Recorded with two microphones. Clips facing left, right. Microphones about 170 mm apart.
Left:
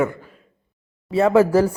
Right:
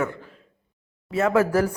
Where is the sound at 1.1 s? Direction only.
30° left (ahead or behind).